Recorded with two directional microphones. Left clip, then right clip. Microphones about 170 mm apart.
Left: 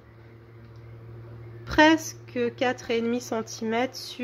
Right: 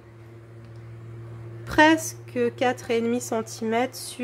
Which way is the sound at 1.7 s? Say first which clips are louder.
Right 1 dB; 5° right (ahead or behind).